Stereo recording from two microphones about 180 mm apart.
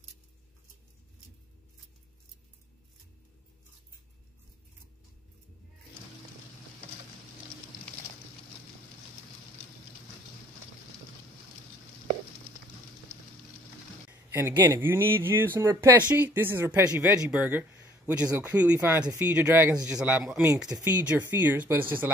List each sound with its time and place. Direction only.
14.3 s speech: 15° right (ahead or behind)